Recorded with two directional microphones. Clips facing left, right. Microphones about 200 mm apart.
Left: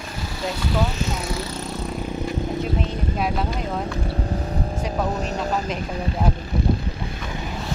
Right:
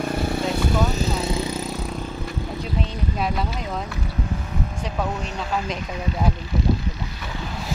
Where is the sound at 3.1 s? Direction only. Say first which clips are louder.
Left 1 dB; centre (ahead or behind).